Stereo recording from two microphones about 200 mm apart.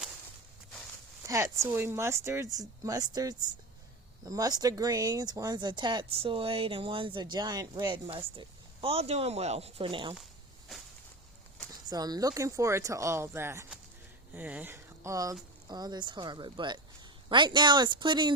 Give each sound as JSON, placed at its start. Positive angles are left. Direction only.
{"t": 1.3, "sound": "speech", "side_deg": -15}
{"t": 11.9, "sound": "speech", "side_deg": -20}